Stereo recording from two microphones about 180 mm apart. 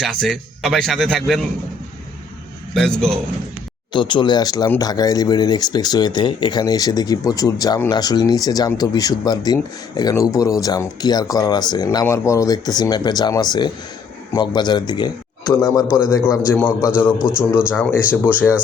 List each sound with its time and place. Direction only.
0.0 s a man's voice: centre (ahead or behind)
2.7 s a man's voice: 5° left (ahead or behind)
3.9 s speech: 25° left (ahead or behind); by 16.9 s 10° left (ahead or behind)
17.2 s a man's voice: 5° right (ahead or behind)
17.7 s speech: 10° left (ahead or behind)